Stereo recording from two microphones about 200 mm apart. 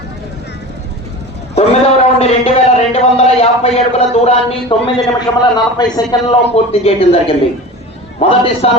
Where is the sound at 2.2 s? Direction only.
30° left (ahead or behind).